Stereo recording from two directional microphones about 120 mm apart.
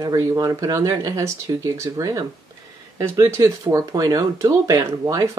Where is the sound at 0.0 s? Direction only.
30° right (ahead or behind).